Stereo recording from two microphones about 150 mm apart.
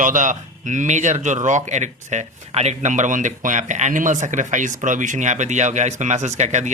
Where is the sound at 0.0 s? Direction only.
60° right (ahead or behind).